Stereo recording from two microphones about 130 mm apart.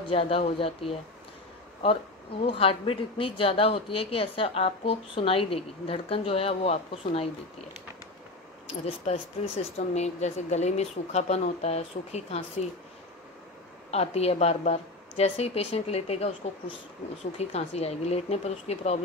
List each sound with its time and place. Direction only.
0.1 s speech: 45° left (ahead or behind)
2.4 s speech: 45° left (ahead or behind)
8.8 s speech: 50° left (ahead or behind)
13.8 s speech: 55° left (ahead or behind)